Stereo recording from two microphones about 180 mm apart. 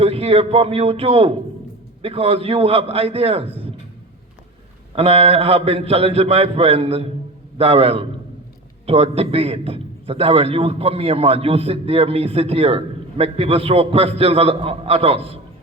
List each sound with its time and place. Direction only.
0.0 s a man's voice: 35° right (ahead or behind)
4.9 s a man's voice: 35° right (ahead or behind)